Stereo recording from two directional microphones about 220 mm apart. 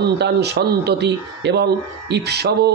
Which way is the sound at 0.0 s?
50° right (ahead or behind).